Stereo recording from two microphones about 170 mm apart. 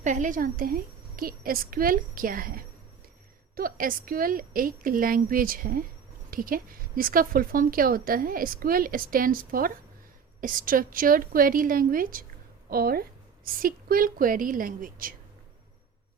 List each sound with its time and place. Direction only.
0.0 s a woman's voice: 50° right (ahead or behind)